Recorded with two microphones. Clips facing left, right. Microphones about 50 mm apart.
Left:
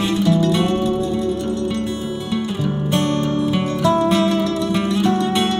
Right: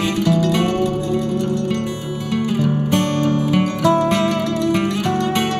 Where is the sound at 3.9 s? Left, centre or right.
Right.